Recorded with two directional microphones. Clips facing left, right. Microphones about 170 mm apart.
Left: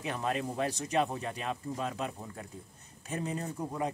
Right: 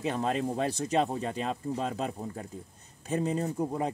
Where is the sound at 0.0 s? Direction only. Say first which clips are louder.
Right 4 dB; 30° right (ahead or behind).